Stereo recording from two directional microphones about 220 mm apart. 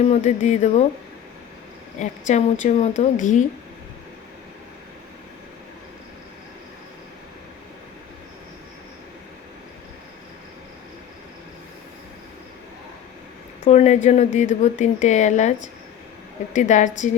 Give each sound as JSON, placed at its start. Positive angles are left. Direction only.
{"t": 0.0, "sound": "speech", "side_deg": 30}
{"t": 2.0, "sound": "speech", "side_deg": 35}
{"t": 13.7, "sound": "speech", "side_deg": 30}